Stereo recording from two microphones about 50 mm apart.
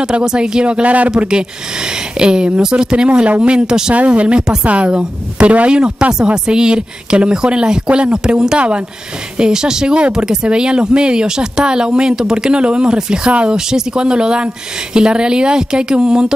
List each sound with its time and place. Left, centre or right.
0.2 s speech: centre
1.1 s speech: centre
3.9 s speech: right
13.6 s speech: centre